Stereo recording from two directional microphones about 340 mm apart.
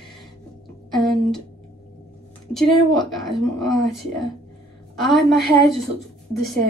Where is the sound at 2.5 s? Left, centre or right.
Centre.